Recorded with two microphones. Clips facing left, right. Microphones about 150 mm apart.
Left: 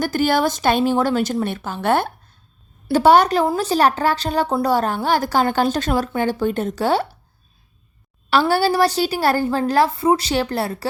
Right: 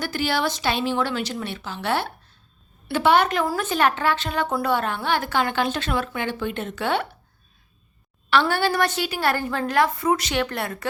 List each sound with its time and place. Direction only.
0.0 s a woman's voice: 45° left (ahead or behind)
8.3 s a woman's voice: 35° left (ahead or behind)